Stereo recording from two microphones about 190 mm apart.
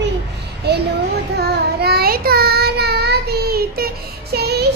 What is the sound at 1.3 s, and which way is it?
Child singing, 55° right (ahead or behind).